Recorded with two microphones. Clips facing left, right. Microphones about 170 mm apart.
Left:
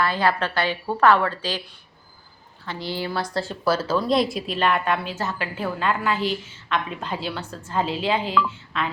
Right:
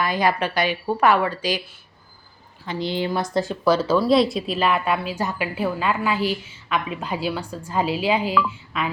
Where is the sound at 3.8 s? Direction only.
10° right (ahead or behind).